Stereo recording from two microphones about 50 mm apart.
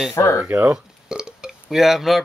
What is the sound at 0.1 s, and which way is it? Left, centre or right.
Speech, left.